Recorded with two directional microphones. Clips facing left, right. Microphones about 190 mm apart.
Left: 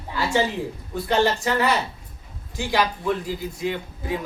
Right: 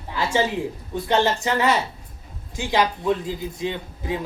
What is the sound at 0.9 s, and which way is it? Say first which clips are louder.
A man's voice: even; 20° right (ahead or behind).